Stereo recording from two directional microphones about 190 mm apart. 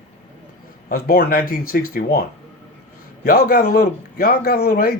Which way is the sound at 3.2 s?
50° left (ahead or behind).